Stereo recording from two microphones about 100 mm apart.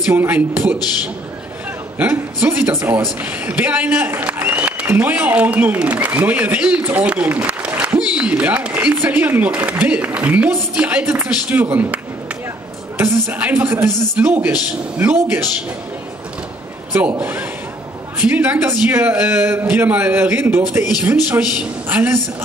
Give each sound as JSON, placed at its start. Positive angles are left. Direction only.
{"t": 0.0, "sound": "a man's voice", "side_deg": -20}
{"t": 2.0, "sound": "a man's voice", "side_deg": -15}
{"t": 17.2, "sound": "a man's voice", "side_deg": -15}